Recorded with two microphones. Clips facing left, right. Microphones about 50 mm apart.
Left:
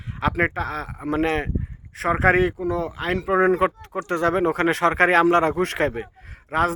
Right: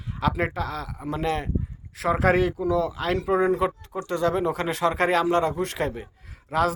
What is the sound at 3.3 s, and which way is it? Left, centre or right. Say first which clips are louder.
Speech: left 6 dB; left.